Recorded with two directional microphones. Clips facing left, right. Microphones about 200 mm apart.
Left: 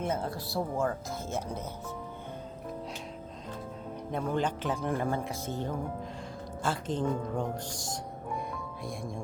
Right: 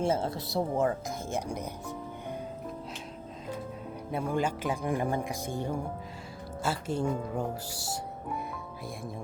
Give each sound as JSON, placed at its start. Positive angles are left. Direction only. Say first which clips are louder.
{"t": 0.0, "sound": "speech", "louder": "right 4 dB", "side_deg": -25}
{"t": 4.1, "sound": "speech", "louder": "right 1 dB", "side_deg": -10}